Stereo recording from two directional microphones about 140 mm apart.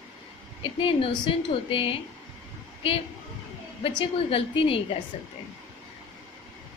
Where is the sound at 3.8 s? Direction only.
40° left (ahead or behind).